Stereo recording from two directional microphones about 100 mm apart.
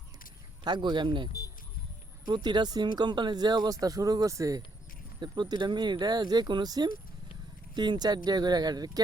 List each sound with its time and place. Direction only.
0.6 s speech: 45° right (ahead or behind)
5.2 s speech: 45° right (ahead or behind)